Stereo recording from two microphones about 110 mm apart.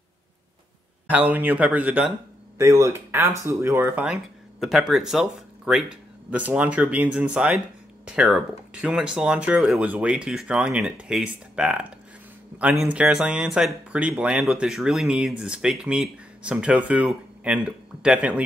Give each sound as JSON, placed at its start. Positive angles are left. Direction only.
{"t": 1.0, "sound": "speech", "side_deg": -15}
{"t": 2.6, "sound": "speech", "side_deg": -25}
{"t": 3.9, "sound": "speech", "side_deg": -5}
{"t": 12.5, "sound": "a sound", "side_deg": -15}
{"t": 12.8, "sound": "speech", "side_deg": -10}